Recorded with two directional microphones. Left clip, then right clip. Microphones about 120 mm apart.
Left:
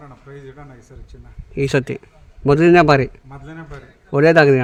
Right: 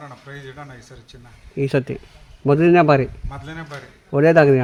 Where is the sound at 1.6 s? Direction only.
45° left (ahead or behind).